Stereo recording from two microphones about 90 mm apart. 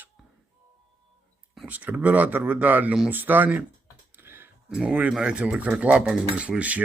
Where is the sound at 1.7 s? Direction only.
15° right (ahead or behind).